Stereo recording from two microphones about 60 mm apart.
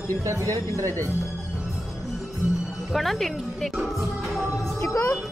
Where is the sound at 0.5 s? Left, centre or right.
Right.